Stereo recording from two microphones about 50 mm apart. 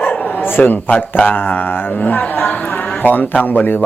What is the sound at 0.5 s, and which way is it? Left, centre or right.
Speech, left.